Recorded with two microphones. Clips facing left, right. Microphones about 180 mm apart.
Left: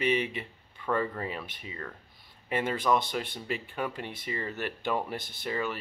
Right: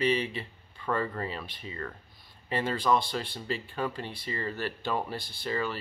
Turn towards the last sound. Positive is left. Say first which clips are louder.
# right 1 dB
turn(degrees=15)  # may be behind; listen again after turning